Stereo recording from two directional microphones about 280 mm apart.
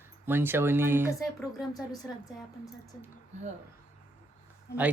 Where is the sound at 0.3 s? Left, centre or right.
Centre.